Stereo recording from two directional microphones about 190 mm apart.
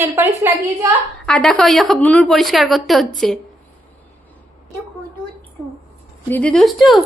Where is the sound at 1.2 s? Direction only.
5° left (ahead or behind).